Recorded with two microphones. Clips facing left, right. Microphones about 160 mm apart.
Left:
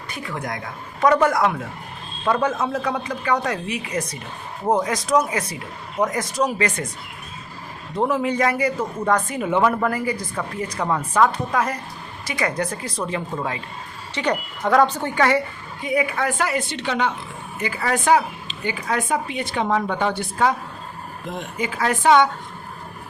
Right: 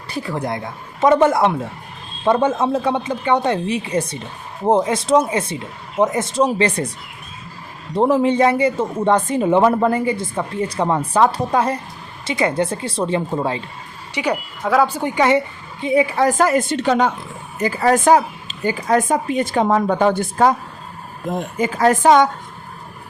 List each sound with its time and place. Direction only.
0.1 s speech: 35° right (ahead or behind)
7.9 s speech: 30° right (ahead or behind)
14.1 s a woman's voice: 10° right (ahead or behind); by 22.3 s 40° right (ahead or behind)